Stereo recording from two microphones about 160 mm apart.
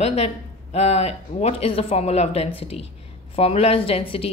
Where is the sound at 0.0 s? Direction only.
40° left (ahead or behind).